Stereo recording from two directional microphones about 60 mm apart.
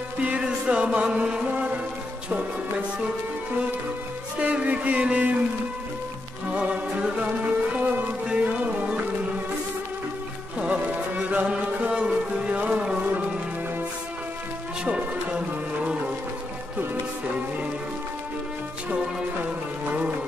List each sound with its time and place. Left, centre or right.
0.4 s music: centre
4.4 s music: right
6.5 s music: centre
10.6 s music: right
14.9 s music: right